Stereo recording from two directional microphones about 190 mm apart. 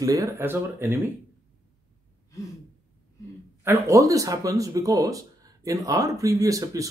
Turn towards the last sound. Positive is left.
turn(degrees=-15)  # may be behind; listen again after turning